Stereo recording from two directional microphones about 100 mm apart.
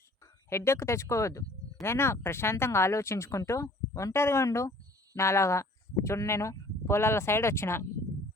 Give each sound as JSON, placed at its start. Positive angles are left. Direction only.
{"t": 0.2, "sound": "speech", "side_deg": 30}